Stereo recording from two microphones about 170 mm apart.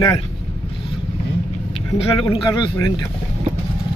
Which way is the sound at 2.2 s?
25° left (ahead or behind).